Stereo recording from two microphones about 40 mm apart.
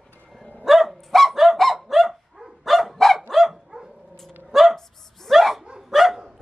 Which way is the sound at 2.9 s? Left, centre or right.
Centre.